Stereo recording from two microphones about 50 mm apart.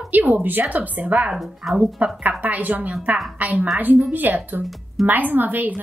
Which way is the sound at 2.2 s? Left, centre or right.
Right.